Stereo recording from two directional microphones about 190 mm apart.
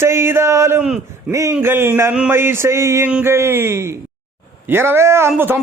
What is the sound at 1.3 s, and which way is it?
A man's voice, 15° right (ahead or behind).